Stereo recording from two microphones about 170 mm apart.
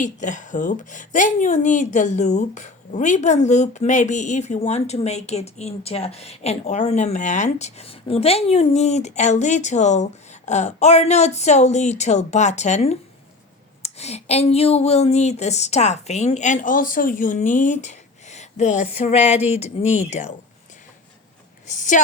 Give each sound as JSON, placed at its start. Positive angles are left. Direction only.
{"t": 0.0, "sound": "a woman's voice", "side_deg": 45}
{"t": 21.7, "sound": "a woman's voice", "side_deg": 50}